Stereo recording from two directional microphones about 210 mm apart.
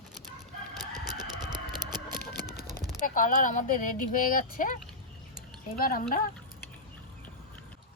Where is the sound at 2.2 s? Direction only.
50° left (ahead or behind).